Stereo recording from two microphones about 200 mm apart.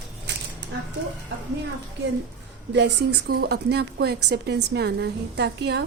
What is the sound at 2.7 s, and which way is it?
A woman's voice, 55° right (ahead or behind).